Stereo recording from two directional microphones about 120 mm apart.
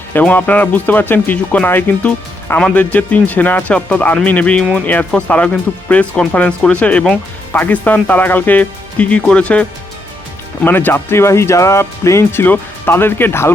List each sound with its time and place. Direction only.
0.1 s speech: 15° left (ahead or behind)